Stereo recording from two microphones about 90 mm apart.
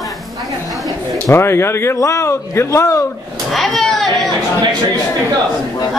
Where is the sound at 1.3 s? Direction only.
30° left (ahead or behind).